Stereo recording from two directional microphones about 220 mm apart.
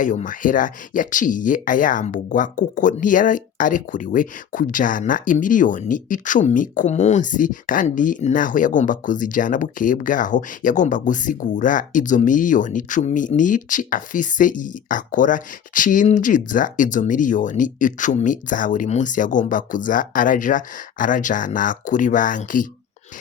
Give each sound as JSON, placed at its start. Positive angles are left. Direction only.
{"t": 0.0, "sound": "speech", "side_deg": 35}